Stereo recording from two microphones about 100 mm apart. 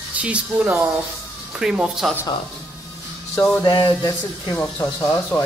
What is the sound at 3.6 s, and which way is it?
Speech, 50° left (ahead or behind).